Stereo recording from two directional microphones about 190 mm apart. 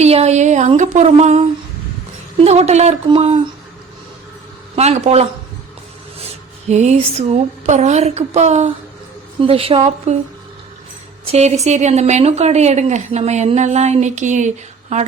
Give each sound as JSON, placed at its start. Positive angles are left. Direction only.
{"t": 0.0, "sound": "a woman's voice", "side_deg": -35}
{"t": 4.7, "sound": "a man's voice", "side_deg": -35}
{"t": 6.7, "sound": "a woman's voice", "side_deg": -35}
{"t": 11.3, "sound": "a woman's voice", "side_deg": -35}